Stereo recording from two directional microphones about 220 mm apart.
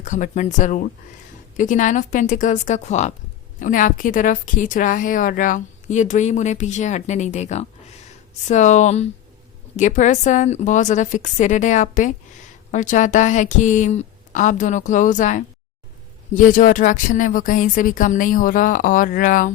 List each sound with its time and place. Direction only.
0.0 s a woman's voice: 35° left (ahead or behind)